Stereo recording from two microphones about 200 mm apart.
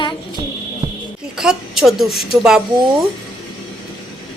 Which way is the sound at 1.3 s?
5° right (ahead or behind).